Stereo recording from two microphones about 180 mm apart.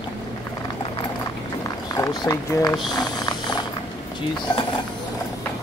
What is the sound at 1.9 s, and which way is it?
Speech, 20° left (ahead or behind).